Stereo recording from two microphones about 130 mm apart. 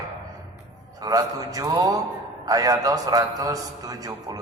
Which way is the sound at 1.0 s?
25° right (ahead or behind).